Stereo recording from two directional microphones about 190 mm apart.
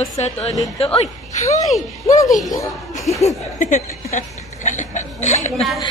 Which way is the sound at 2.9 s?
15° left (ahead or behind).